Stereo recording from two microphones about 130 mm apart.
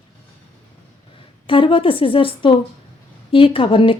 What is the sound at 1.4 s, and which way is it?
A woman's voice, 40° left (ahead or behind).